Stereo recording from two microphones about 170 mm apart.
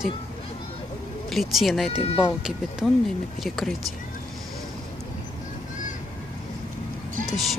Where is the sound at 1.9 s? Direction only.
35° left (ahead or behind).